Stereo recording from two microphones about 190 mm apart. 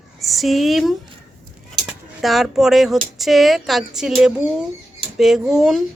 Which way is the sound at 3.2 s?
Centre (ahead or behind).